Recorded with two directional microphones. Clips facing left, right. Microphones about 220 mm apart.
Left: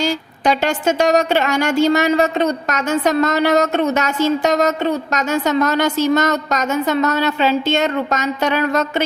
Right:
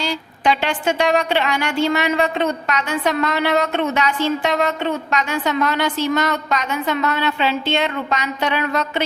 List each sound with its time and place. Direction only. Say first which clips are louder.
0.0 s a woman's voice: left 3 dB; 45° left (ahead or behind)